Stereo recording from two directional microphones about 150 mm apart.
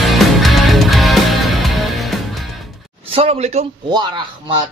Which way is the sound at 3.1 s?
40° right (ahead or behind).